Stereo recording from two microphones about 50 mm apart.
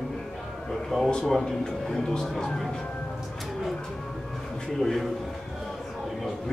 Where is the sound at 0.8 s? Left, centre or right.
Centre.